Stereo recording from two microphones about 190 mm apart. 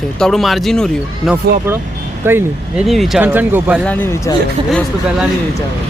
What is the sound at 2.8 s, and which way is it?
Speech, centre (ahead or behind).